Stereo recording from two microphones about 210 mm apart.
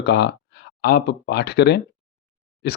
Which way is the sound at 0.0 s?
55° left (ahead or behind).